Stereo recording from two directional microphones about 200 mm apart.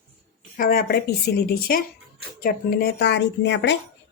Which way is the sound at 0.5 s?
45° left (ahead or behind).